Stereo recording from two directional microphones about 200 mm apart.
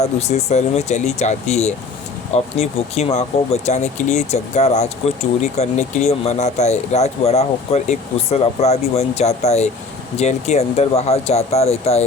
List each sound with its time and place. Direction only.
0.0 s speech: 35° left (ahead or behind)